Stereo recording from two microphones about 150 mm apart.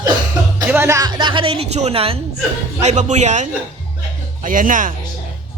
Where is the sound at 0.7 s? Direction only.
15° right (ahead or behind); by 2.2 s 40° right (ahead or behind).